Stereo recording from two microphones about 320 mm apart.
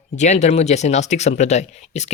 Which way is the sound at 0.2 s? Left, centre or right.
Left.